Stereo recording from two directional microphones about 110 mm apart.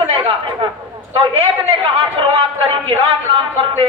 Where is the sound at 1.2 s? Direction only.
55° right (ahead or behind).